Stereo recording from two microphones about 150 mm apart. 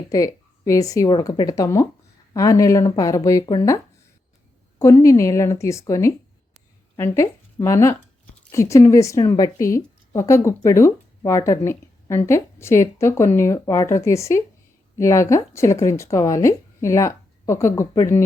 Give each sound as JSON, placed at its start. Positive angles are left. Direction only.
{"t": 0.1, "sound": "speech", "side_deg": 20}
{"t": 4.8, "sound": "speech", "side_deg": 20}